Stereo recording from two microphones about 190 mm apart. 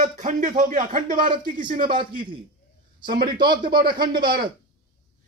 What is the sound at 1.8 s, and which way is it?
Speech, 25° right (ahead or behind).